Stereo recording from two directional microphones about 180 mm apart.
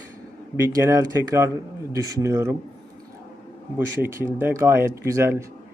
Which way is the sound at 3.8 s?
15° right (ahead or behind).